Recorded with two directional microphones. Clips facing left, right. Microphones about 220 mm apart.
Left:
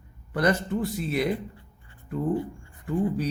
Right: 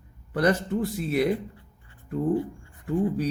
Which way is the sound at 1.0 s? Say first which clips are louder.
Right 4 dB; 50° right (ahead or behind).